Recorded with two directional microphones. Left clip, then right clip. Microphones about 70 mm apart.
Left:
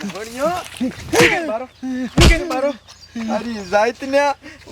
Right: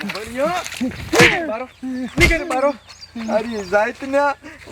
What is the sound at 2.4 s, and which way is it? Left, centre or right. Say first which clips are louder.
Speech: right 2 dB; left.